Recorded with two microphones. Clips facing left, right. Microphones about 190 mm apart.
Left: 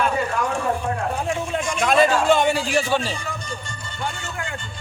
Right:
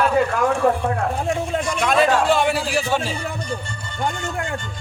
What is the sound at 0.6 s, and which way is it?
Speech, 65° right (ahead or behind).